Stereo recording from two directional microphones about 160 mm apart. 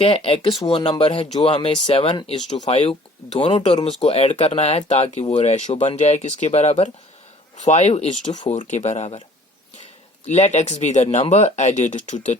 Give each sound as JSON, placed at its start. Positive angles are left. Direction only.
{"t": 0.0, "sound": "speech", "side_deg": 35}
{"t": 3.5, "sound": "speech", "side_deg": 45}
{"t": 10.2, "sound": "speech", "side_deg": 45}